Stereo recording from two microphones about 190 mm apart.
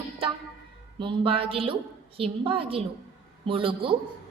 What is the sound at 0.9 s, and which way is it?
A woman's voice, 25° right (ahead or behind).